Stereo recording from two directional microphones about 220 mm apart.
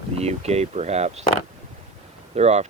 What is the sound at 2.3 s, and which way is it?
Speech, 30° right (ahead or behind).